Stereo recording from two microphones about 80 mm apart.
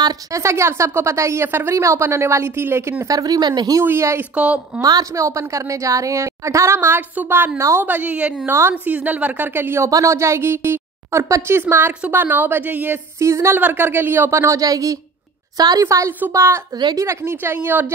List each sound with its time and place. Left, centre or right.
0.3 s a woman's voice: right
3.1 s speech: right
3.8 s a woman's voice: right
4.4 s a woman's voice: centre
4.8 s a woman's voice: right
9.8 s a woman's voice: right
13.2 s a woman's voice: right
13.6 s a woman's voice: right
15.8 s a woman's voice: right